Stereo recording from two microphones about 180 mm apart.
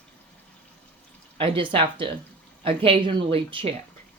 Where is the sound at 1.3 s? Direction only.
30° right (ahead or behind).